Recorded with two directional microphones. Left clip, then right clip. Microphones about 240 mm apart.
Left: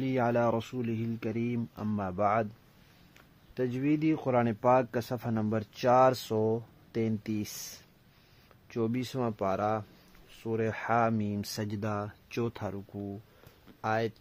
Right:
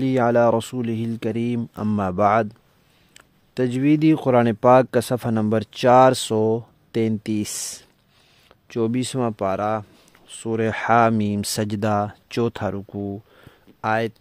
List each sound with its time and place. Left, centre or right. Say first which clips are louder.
0.0 s speech: right 11 dB; right
8.6 s speech: right 10 dB; right